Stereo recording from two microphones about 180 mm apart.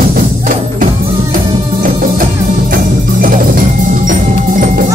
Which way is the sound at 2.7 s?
50° right (ahead or behind).